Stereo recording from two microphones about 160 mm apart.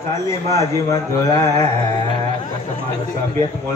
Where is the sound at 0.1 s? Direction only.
20° left (ahead or behind).